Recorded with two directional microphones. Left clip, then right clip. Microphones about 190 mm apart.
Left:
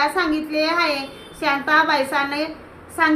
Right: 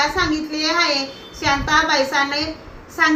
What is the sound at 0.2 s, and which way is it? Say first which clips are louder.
A woman's voice: even; 25° left (ahead or behind).